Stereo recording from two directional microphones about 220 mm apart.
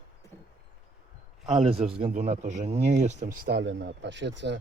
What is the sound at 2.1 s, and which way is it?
Speech, 30° right (ahead or behind).